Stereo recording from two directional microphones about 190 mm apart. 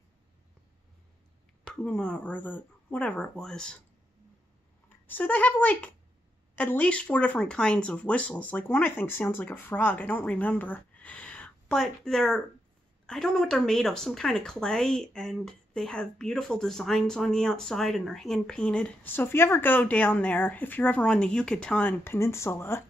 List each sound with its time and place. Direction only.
1.7 s a woman's voice: 5° left (ahead or behind)
4.8 s a woman's voice: 10° left (ahead or behind)